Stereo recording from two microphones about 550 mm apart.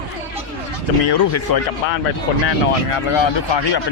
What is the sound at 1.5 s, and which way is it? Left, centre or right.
Speech, left.